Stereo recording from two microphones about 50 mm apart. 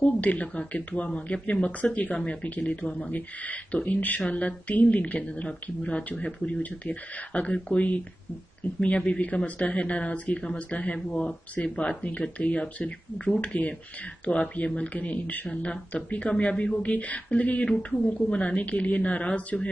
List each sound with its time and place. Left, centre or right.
0.0 s speech: left
3.1 s speech: left
15.4 s speech: left